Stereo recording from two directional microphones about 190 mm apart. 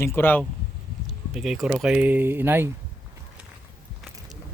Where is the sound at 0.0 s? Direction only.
10° left (ahead or behind).